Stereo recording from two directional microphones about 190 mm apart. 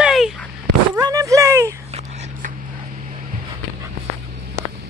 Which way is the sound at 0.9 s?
15° right (ahead or behind).